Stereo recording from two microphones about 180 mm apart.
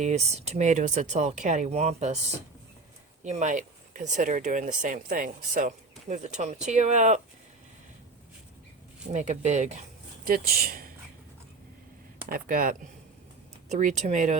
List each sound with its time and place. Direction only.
0.0 s speech: 40° right (ahead or behind)
3.2 s speech: 40° right (ahead or behind)
9.1 s speech: 40° right (ahead or behind)
10.2 s speech: 55° right (ahead or behind)
12.3 s speech: 50° right (ahead or behind)
13.7 s speech: 40° right (ahead or behind)